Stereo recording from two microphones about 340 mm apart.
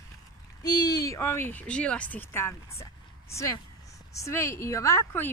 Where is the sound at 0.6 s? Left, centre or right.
Centre.